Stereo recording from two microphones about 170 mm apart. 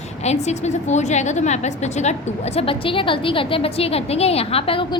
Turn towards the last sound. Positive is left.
turn(degrees=30)  # may be behind; listen again after turning